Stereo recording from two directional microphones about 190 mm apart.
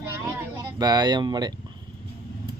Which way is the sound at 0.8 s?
20° right (ahead or behind).